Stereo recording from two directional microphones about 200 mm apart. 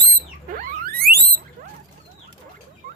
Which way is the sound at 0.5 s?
45° right (ahead or behind).